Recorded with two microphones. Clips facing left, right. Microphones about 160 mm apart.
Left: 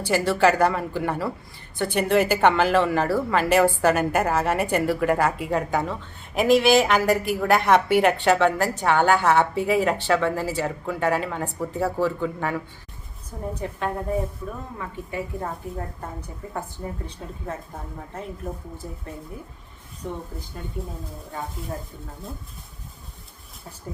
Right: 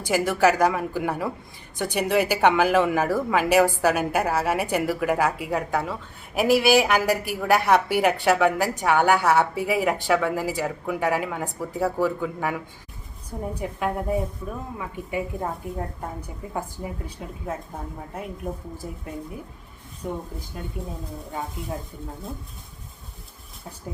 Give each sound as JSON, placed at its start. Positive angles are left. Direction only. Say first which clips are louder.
{"t": 0.0, "sound": "speech", "louder": "left 1 dB", "side_deg": -10}
{"t": 16.6, "sound": "speech", "louder": "right 1 dB", "side_deg": -10}
{"t": 20.0, "sound": "speech", "louder": "right 1 dB", "side_deg": -5}